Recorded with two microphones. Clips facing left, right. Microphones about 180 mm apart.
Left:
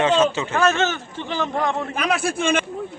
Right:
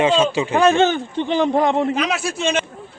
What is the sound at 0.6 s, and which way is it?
A man's voice, 30° right (ahead or behind).